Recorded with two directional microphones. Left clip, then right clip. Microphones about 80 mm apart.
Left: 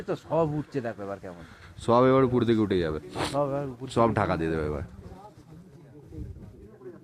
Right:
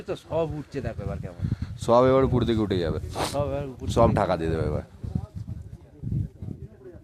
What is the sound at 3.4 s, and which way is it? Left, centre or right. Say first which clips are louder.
Speech: left 1 dB; centre.